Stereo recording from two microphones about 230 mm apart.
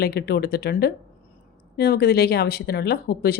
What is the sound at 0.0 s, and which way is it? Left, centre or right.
Speech, left.